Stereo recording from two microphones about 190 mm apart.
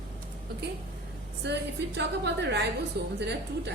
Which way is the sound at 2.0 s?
65° right (ahead or behind).